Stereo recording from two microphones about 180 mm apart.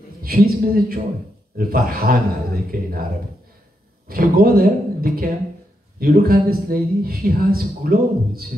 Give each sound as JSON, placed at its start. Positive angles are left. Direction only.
{"t": 0.2, "sound": "speech", "side_deg": -55}
{"t": 4.1, "sound": "speech", "side_deg": -55}